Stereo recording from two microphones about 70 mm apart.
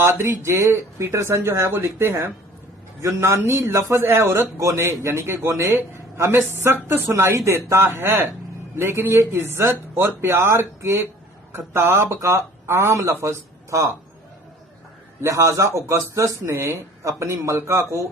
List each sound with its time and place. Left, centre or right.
0.0 s a man's voice: right
15.2 s speech: right